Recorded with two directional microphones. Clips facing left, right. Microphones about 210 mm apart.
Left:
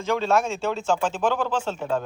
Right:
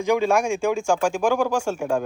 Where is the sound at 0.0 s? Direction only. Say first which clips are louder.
Right 3 dB; 15° right (ahead or behind).